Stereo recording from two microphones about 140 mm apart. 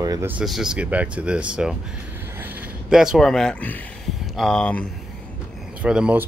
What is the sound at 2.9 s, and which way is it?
Speech, 5° right (ahead or behind).